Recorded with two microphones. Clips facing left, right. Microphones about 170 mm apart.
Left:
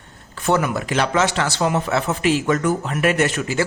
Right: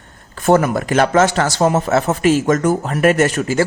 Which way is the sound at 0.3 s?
45° right (ahead or behind).